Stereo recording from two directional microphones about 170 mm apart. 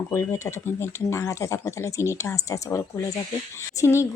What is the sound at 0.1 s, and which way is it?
Speech, 15° left (ahead or behind).